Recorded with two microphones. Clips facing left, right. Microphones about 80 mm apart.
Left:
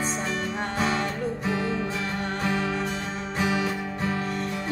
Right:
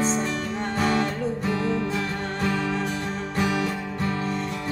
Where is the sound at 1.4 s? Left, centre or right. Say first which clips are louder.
Right 2 dB; centre.